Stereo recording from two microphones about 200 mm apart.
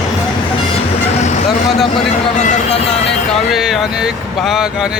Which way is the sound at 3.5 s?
Centre (ahead or behind).